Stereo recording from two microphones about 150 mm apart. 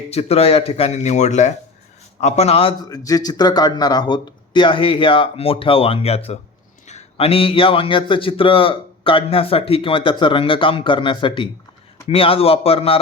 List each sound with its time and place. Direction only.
0.1 s speech: 45° left (ahead or behind)
2.9 s a man's voice: 25° left (ahead or behind); by 13.0 s 40° left (ahead or behind)